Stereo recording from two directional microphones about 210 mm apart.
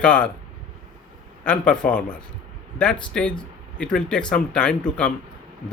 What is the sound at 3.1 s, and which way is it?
Speech, 5° left (ahead or behind).